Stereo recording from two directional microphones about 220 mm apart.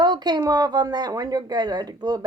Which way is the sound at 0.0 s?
20° right (ahead or behind).